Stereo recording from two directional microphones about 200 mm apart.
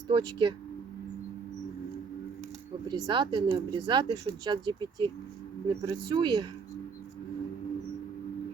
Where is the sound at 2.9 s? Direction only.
25° right (ahead or behind).